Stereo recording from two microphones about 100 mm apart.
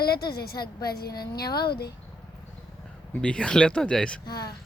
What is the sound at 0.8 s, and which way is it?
Speech, 40° left (ahead or behind).